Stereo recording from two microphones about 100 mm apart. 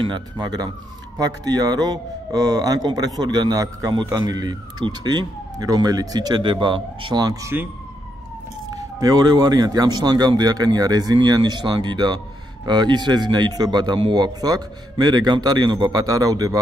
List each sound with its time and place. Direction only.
0.0 s speech: 45° right (ahead or behind)
8.6 s speech: 35° right (ahead or behind)